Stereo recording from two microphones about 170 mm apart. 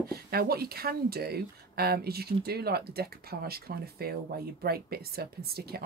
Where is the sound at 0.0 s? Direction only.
65° right (ahead or behind).